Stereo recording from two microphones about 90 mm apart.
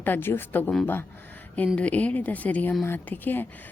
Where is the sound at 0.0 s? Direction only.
25° left (ahead or behind).